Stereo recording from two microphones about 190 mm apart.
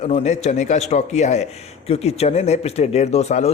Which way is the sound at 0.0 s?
35° left (ahead or behind).